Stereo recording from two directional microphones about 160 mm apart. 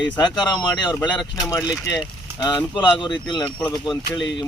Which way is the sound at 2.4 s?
25° left (ahead or behind).